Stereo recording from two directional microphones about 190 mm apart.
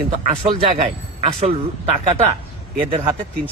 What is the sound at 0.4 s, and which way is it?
Speech, 30° right (ahead or behind).